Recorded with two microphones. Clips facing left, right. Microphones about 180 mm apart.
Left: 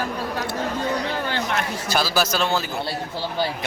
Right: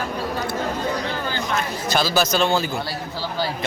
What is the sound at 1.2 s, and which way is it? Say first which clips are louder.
Chatter: even; 70° left (ahead or behind).